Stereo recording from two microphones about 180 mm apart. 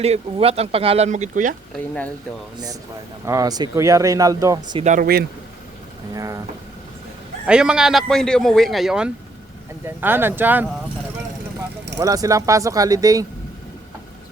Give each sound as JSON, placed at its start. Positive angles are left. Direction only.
{"t": 0.0, "sound": "speech", "side_deg": -35}
{"t": 1.7, "sound": "speech", "side_deg": 10}
{"t": 3.2, "sound": "speech", "side_deg": -20}
{"t": 4.8, "sound": "speech", "side_deg": -40}
{"t": 6.1, "sound": "speech", "side_deg": -20}
{"t": 7.4, "sound": "a man's voice", "side_deg": -5}
{"t": 11.9, "sound": "speech", "side_deg": -20}